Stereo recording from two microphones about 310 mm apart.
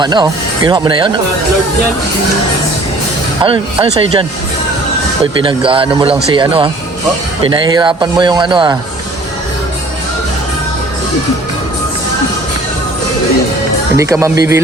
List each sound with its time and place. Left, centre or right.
0.0 s a man's voice: centre
3.4 s a man's voice: centre
13.9 s a man's voice: centre